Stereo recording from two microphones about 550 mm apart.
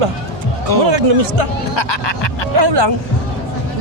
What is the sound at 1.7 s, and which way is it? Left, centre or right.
Speech, left.